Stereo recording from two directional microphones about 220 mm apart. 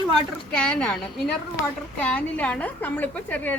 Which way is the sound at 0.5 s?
5° left (ahead or behind).